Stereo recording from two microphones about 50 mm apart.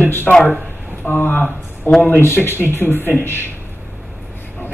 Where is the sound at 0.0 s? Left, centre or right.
Left.